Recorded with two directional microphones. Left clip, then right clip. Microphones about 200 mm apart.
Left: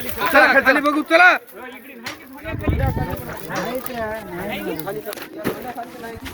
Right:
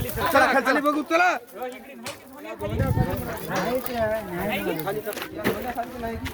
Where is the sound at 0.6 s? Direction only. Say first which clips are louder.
Left 6 dB; 45° left (ahead or behind).